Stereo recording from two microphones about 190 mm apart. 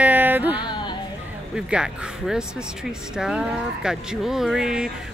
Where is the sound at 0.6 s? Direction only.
25° left (ahead or behind).